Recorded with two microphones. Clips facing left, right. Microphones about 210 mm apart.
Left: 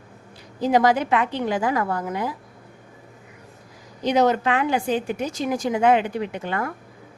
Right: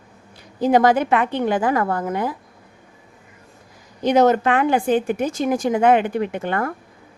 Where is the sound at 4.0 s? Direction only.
50° right (ahead or behind).